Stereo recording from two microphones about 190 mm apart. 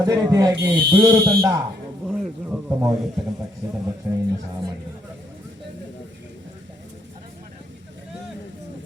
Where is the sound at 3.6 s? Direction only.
15° right (ahead or behind).